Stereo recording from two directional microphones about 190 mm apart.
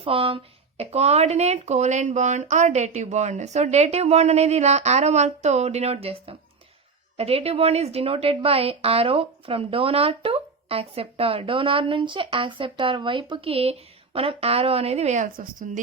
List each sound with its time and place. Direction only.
0.0 s speech: 30° right (ahead or behind)